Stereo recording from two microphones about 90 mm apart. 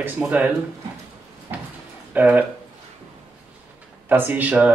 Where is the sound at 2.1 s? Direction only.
15° right (ahead or behind).